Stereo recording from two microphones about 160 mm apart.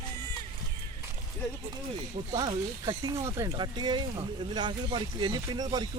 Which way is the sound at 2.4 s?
25° right (ahead or behind).